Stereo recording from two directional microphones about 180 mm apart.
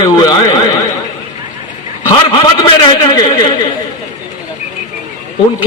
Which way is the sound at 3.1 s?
25° left (ahead or behind).